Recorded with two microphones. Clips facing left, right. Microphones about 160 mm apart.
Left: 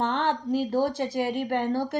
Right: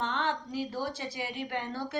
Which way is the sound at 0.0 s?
60° left (ahead or behind).